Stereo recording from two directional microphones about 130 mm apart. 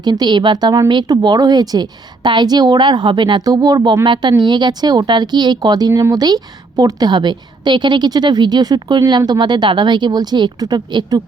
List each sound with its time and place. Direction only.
0.0 s speech: 35° right (ahead or behind)